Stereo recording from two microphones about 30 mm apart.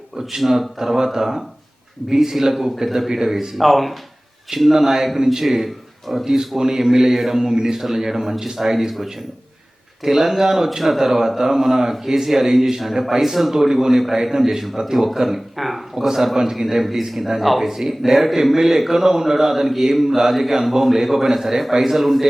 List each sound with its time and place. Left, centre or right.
0.3 s a man's voice: centre
3.5 s speech: centre
4.7 s a man's voice: centre
5.6 s a sound: centre
6.2 s a man's voice: centre
7.5 s a man's voice: right; by 15.8 s centre
16.0 s a man's voice: centre